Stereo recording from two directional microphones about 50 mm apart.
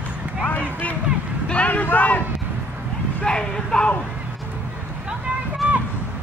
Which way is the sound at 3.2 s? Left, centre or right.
Centre.